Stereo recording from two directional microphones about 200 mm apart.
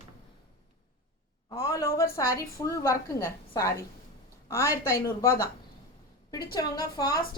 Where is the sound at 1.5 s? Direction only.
15° left (ahead or behind).